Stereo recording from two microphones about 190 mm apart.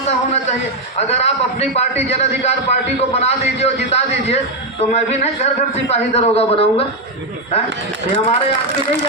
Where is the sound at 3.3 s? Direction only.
35° left (ahead or behind).